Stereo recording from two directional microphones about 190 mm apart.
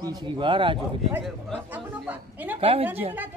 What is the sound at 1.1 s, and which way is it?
A man's voice, centre (ahead or behind).